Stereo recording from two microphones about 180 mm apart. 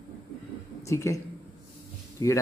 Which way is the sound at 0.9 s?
15° left (ahead or behind).